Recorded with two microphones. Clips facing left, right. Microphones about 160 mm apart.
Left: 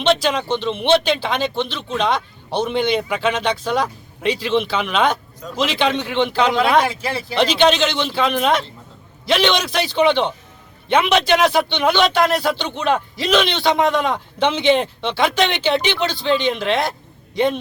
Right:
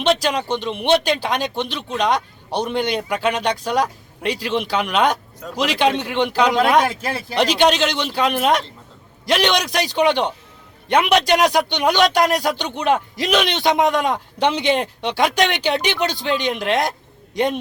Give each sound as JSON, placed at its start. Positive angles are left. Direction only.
{"t": 0.0, "sound": "a man's voice", "side_deg": -10}
{"t": 6.8, "sound": "speech", "side_deg": -50}
{"t": 7.3, "sound": "a man's voice", "side_deg": -10}